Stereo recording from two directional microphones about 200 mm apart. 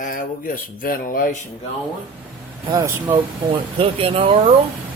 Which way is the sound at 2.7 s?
20° right (ahead or behind).